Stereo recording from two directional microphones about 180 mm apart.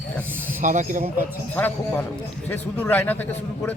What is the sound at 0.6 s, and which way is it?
Speech, 45° right (ahead or behind).